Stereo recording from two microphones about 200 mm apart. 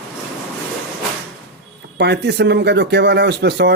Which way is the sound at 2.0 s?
55° right (ahead or behind).